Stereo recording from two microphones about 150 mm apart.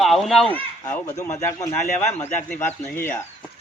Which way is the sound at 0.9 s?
20° left (ahead or behind).